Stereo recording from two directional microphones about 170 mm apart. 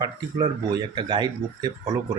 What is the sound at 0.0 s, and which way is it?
Speech, 25° right (ahead or behind).